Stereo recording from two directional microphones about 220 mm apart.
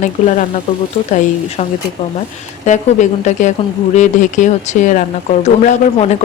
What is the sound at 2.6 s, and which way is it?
Speech, 35° left (ahead or behind).